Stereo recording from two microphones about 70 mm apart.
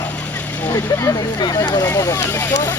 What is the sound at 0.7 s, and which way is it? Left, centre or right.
Speech, left.